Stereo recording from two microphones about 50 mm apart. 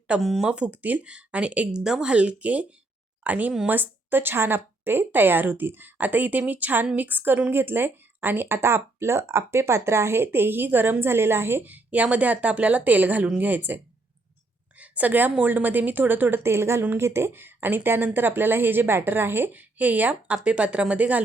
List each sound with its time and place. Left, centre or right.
0.2 s speech: centre
0.4 s a woman's voice: right
3.7 s a woman's voice: right
11.6 s a woman's voice: right
14.8 s a woman's voice: right
16.4 s a woman's voice: right
19.5 s speech: right